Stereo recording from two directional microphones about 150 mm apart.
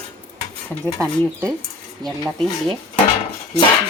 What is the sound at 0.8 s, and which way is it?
Speech, 20° right (ahead or behind).